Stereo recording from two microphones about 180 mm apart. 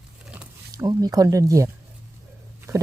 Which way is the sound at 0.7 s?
20° right (ahead or behind).